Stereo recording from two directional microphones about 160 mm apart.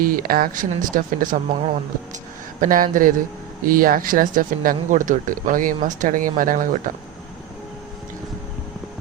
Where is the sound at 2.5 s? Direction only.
60° right (ahead or behind).